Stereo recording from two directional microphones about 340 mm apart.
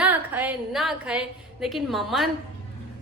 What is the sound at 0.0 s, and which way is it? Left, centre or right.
A woman's voice, centre.